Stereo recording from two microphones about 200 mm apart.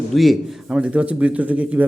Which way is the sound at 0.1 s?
Centre (ahead or behind).